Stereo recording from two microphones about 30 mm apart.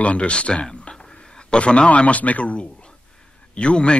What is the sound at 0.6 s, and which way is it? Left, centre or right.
Speech, left.